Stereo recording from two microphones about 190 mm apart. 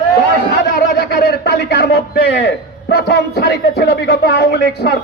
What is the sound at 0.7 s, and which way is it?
A man's voice, 55° left (ahead or behind).